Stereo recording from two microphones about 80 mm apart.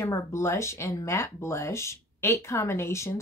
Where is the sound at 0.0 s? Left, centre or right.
Left.